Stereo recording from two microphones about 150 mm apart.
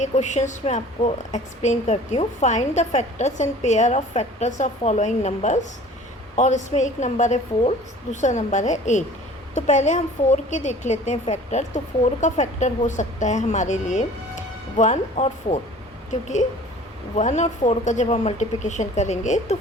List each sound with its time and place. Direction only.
0.0 s a woman's voice: 50° left (ahead or behind)
17.2 s a woman's voice: 50° left (ahead or behind)